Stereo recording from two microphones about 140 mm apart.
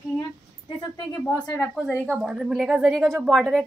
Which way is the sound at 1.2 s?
20° left (ahead or behind).